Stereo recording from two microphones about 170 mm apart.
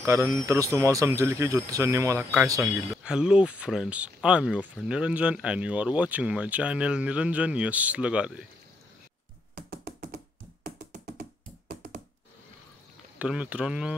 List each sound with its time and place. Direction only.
0.0 s speech: 15° right (ahead or behind)
2.9 s speech: 5° right (ahead or behind)
9.6 s computer keyboard: 60° right (ahead or behind)
10.6 s music: 65° right (ahead or behind)
13.2 s speech: 5° right (ahead or behind)